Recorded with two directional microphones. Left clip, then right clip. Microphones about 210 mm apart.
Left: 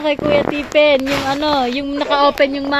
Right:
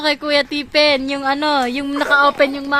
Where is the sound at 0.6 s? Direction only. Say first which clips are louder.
Left 3 dB; 55° right (ahead or behind).